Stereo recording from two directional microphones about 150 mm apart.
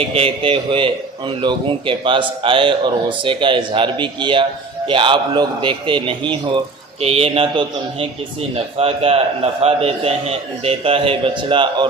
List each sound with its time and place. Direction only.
0.1 s a man's voice: 40° right (ahead or behind)